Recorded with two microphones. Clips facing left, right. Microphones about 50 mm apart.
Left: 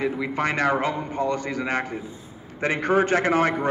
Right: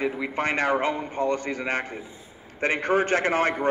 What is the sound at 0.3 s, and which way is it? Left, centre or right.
A man's voice, right.